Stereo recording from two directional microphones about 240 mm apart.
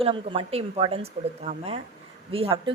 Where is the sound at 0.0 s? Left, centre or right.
Right.